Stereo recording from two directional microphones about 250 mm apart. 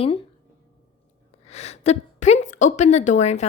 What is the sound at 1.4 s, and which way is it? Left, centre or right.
A woman's voice, left.